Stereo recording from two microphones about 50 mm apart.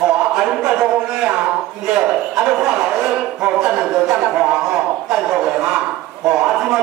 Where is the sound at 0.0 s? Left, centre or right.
Centre.